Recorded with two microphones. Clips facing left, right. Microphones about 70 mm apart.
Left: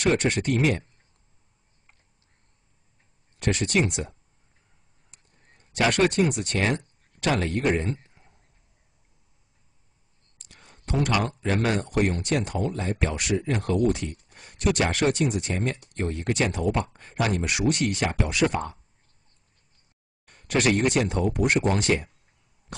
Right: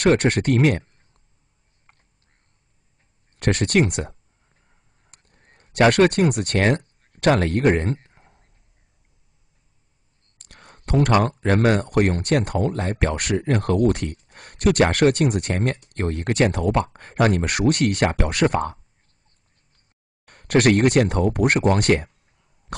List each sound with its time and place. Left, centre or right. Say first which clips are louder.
0.0 s speech: right 5 dB; right
3.3 s speech: right 5 dB; right
5.1 s a sound: right 4 dB; right
10.4 s speech: right 4 dB; right
20.2 s speech: right 6 dB; right
22.7 s cough: right 7 dB; right